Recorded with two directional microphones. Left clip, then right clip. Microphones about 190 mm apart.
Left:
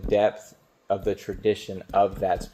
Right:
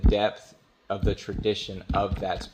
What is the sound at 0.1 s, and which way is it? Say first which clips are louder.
Speech: left 5 dB; 20° right (ahead or behind).